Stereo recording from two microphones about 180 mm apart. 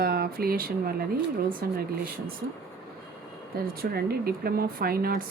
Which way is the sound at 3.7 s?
60° right (ahead or behind).